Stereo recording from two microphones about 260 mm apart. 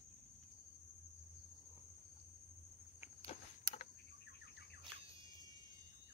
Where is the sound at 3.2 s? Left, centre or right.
Left.